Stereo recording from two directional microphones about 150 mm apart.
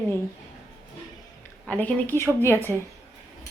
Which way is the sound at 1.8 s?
15° left (ahead or behind).